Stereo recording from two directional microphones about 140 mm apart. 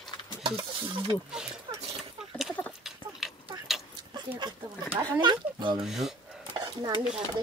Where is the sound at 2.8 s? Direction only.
Centre (ahead or behind).